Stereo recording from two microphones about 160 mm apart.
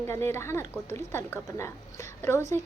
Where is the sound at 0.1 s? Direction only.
15° left (ahead or behind).